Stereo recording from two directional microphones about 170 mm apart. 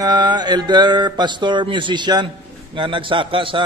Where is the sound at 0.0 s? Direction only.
25° right (ahead or behind).